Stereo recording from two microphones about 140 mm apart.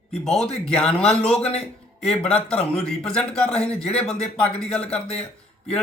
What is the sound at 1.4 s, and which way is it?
Speech, 45° left (ahead or behind).